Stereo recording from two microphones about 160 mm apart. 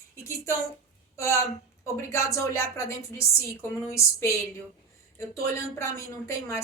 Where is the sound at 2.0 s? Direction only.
20° left (ahead or behind).